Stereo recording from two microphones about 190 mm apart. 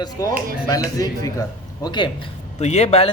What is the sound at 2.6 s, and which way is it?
Speech, 35° left (ahead or behind).